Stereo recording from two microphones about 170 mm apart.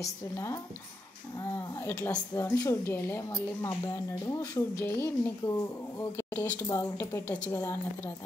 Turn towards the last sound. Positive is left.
turn(degrees=15)  # may be behind; listen again after turning